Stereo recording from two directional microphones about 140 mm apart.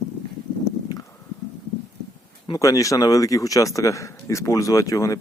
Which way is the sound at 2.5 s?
25° left (ahead or behind).